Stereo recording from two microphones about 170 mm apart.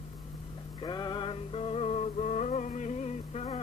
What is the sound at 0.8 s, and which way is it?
Music, 25° left (ahead or behind).